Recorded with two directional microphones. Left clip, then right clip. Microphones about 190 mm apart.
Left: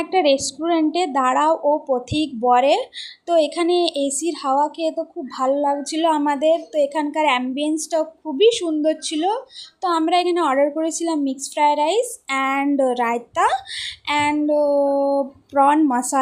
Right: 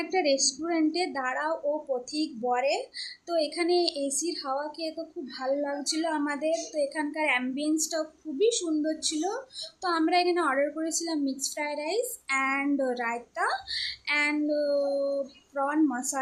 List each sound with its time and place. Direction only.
0.0 s a woman's voice: 35° left (ahead or behind)